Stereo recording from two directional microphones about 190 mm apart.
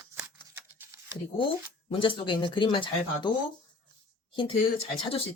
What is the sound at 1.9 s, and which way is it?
Speech, 25° left (ahead or behind).